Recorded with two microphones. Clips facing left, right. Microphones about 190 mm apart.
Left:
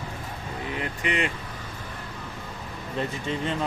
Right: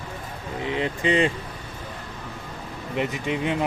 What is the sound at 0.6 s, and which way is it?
Speech, 25° right (ahead or behind).